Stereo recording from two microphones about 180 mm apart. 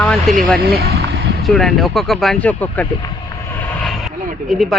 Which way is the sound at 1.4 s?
Centre (ahead or behind).